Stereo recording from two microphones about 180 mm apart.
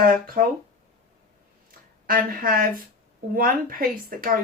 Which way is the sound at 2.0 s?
50° right (ahead or behind).